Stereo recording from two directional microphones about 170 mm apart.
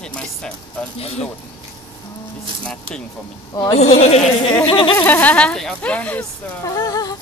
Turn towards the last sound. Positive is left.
turn(degrees=20)  # may be behind; listen again after turning